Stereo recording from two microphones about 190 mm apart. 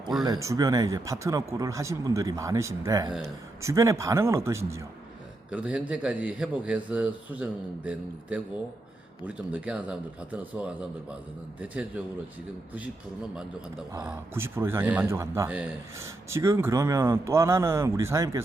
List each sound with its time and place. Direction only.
0.3 s speech: 15° right (ahead or behind)
14.0 s speech: 10° right (ahead or behind)